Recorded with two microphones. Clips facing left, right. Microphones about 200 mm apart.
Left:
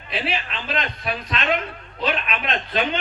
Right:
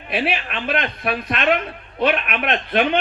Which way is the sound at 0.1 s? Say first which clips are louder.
Right 4 dB; 55° right (ahead or behind).